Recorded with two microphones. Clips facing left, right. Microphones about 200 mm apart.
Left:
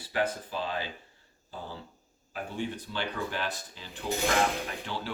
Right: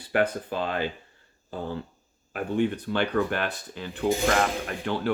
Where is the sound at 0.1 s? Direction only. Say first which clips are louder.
Right 6 dB; 60° right (ahead or behind).